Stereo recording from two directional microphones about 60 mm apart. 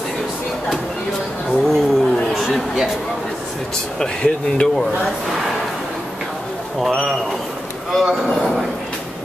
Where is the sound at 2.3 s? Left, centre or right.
Centre.